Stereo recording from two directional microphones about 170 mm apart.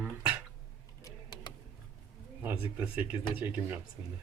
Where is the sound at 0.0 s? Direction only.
15° right (ahead or behind).